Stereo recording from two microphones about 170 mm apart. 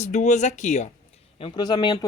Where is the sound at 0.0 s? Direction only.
45° left (ahead or behind).